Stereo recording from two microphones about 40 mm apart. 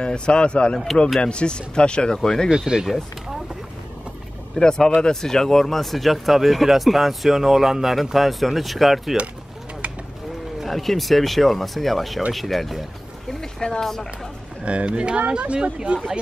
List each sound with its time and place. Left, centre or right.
0.0 s speech: left
2.1 s speech: centre
2.5 s speech: centre
4.6 s speech: centre
10.7 s speech: centre
13.6 s speech: centre
14.6 s speech: right